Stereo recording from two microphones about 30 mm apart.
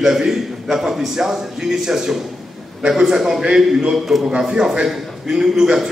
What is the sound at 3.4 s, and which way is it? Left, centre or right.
A man's voice, right.